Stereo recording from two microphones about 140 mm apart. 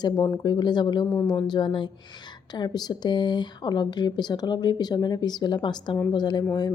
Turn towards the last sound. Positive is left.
turn(degrees=30)  # may be behind; listen again after turning